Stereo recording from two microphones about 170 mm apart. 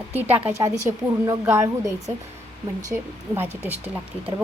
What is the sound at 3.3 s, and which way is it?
Speech, 15° right (ahead or behind).